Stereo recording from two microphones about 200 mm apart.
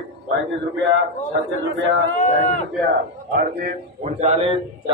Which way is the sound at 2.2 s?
35° left (ahead or behind).